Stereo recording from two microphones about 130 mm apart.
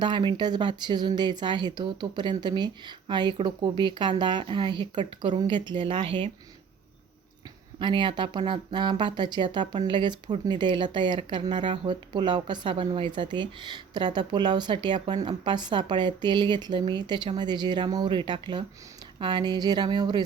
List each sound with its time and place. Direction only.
0.0 s speech: 35° right (ahead or behind)
7.8 s speech: 35° right (ahead or behind)